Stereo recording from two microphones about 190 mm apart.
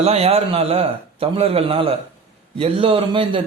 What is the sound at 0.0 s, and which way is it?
A man's voice, 30° right (ahead or behind).